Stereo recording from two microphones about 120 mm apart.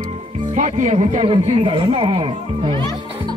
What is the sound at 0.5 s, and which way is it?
Speech, 85° right.